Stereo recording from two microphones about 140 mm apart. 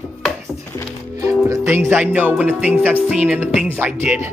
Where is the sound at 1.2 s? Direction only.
20° right (ahead or behind).